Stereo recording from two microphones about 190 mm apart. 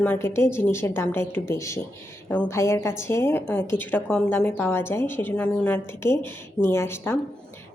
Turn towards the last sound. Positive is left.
turn(degrees=15)  # may be behind; listen again after turning